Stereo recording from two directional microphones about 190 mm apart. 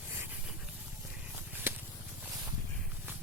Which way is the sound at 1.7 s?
10° right (ahead or behind).